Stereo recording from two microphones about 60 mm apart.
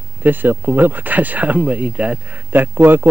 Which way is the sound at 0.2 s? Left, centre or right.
Right.